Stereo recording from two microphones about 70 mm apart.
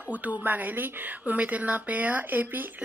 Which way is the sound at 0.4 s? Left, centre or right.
Right.